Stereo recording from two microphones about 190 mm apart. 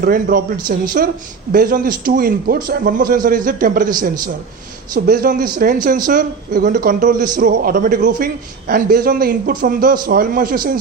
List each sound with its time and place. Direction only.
0.0 s a man's voice: 50° right (ahead or behind)